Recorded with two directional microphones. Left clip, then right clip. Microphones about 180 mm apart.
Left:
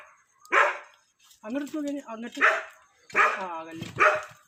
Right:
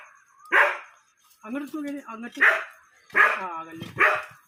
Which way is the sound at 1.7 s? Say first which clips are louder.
Left 1 dB; 15° right (ahead or behind).